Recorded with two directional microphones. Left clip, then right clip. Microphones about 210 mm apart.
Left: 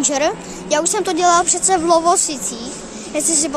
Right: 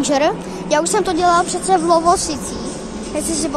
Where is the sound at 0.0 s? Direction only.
20° left (ahead or behind).